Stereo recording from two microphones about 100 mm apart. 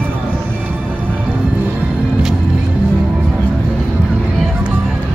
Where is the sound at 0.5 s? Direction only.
15° right (ahead or behind).